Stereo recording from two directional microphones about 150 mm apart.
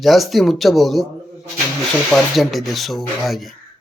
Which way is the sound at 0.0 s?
Centre (ahead or behind).